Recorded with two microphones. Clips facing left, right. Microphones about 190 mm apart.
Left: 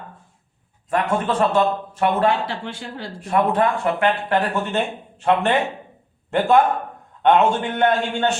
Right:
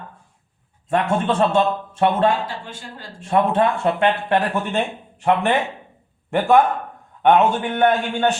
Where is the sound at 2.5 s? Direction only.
70° left (ahead or behind).